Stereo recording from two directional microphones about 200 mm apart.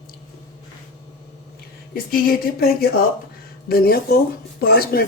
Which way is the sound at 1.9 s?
45° left (ahead or behind).